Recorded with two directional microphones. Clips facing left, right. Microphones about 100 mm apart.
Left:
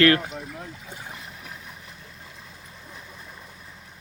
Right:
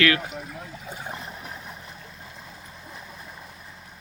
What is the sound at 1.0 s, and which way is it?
Vehicle, 30° right (ahead or behind).